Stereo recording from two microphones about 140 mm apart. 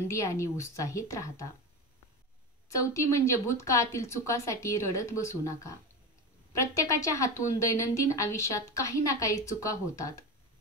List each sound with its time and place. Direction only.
0.1 s a woman's voice: 20° left (ahead or behind)
2.8 s a woman's voice: 20° left (ahead or behind)